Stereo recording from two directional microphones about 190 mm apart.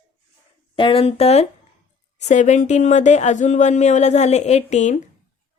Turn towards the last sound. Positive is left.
turn(degrees=40)  # may be behind; listen again after turning